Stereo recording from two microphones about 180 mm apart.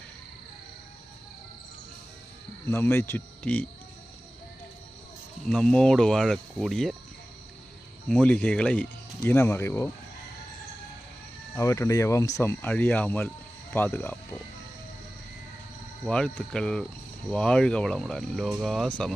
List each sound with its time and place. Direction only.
2.6 s speech: 15° left (ahead or behind)
5.5 s speech: 5° left (ahead or behind)
8.0 s speech: 5° left (ahead or behind)
11.5 s speech: 20° left (ahead or behind)
16.0 s speech: 5° left (ahead or behind)